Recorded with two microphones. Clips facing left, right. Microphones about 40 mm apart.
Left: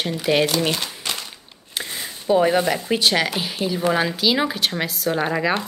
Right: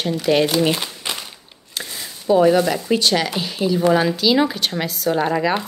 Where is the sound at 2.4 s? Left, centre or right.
Centre.